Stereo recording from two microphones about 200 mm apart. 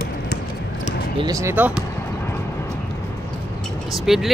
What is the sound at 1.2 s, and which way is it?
Speech, 15° right (ahead or behind).